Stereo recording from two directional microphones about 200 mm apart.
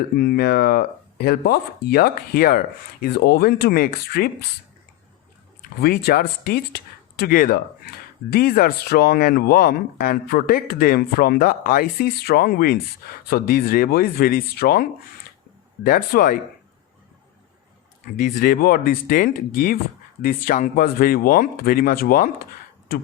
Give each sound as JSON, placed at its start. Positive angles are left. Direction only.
{"t": 0.2, "sound": "speech", "side_deg": 50}
{"t": 5.8, "sound": "speech", "side_deg": 50}
{"t": 18.2, "sound": "speech", "side_deg": 45}